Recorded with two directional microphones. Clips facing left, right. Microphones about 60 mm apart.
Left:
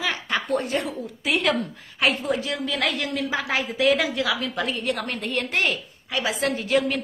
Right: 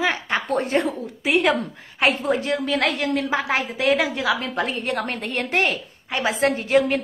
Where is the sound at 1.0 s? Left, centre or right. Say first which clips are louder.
Right 4 dB; right.